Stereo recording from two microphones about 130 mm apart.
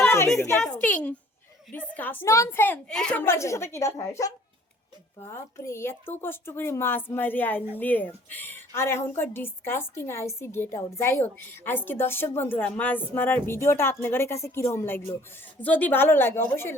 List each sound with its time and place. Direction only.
0.0 s a sound: 20° left (ahead or behind)
0.8 s a woman's voice: 10° left (ahead or behind)
3.2 s a woman's voice: 20° left (ahead or behind)
5.3 s a woman's voice: 20° left (ahead or behind)